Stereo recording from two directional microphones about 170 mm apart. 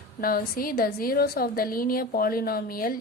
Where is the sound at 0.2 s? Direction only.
60° left (ahead or behind).